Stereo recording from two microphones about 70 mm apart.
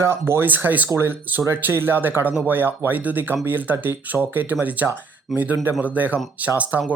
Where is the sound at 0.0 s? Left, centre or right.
Right.